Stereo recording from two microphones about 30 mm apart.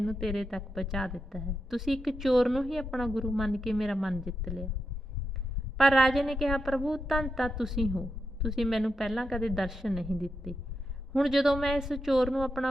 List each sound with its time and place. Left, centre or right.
0.0 s a woman's voice: centre
5.8 s a woman's voice: centre
7.5 s speech: centre
8.0 s a sound: centre
8.6 s a woman's voice: centre